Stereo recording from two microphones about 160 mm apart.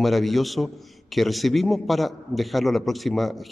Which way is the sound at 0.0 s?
Centre (ahead or behind).